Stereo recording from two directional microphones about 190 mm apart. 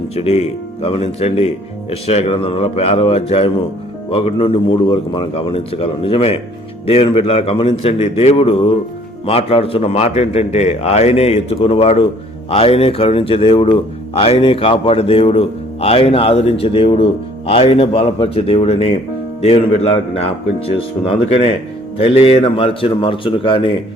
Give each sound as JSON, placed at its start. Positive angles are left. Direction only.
{"t": 0.1, "sound": "a man's voice", "side_deg": 35}